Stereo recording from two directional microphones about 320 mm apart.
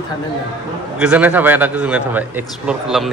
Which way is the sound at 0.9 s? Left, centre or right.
Centre.